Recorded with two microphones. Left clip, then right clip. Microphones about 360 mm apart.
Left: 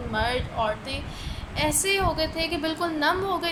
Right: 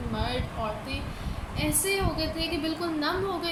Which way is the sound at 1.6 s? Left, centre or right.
Centre.